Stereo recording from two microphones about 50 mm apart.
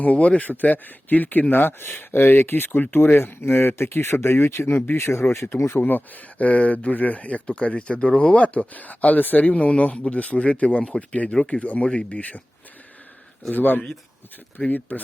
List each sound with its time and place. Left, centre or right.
0.0 s speech: left
5.6 s speech: left
6.4 s speech: left; by 11.6 s centre
11.6 s speech: left
13.5 s speech: left